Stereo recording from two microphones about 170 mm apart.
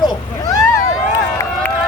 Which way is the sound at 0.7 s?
15° left (ahead or behind).